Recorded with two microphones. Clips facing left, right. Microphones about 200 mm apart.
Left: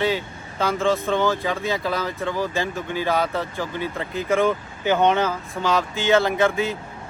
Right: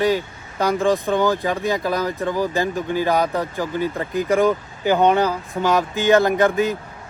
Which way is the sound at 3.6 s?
45° right (ahead or behind).